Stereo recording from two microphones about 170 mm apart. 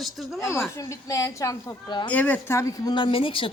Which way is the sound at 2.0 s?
10° left (ahead or behind).